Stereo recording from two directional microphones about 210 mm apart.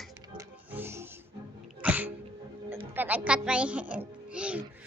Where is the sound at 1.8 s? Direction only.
5° right (ahead or behind).